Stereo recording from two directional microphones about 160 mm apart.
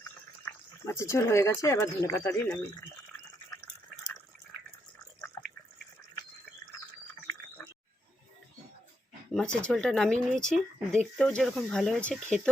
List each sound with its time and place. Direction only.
0.4 s speech: 15° left (ahead or behind)
9.3 s speech: 5° left (ahead or behind)